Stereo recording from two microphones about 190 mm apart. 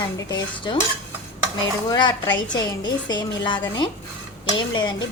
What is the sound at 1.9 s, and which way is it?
A woman's voice, 20° left (ahead or behind).